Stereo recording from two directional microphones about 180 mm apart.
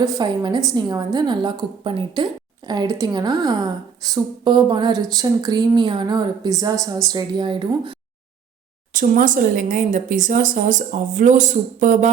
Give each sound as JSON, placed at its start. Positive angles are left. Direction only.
{"t": 0.0, "sound": "a woman's voice", "side_deg": -20}
{"t": 8.9, "sound": "speech", "side_deg": -45}